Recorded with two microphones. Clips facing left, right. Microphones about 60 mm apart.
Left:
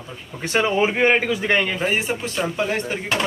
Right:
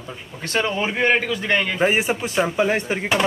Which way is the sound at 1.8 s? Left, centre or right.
Centre.